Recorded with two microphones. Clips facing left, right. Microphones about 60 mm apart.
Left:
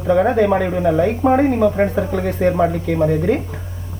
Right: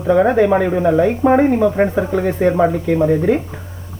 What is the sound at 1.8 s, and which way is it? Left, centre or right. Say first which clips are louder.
Speech: right 2 dB; centre.